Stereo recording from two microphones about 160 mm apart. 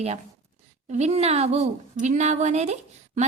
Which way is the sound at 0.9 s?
45° right (ahead or behind).